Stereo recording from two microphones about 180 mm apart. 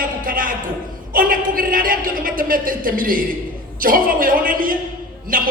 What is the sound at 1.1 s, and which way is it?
A woman's voice, 50° right (ahead or behind).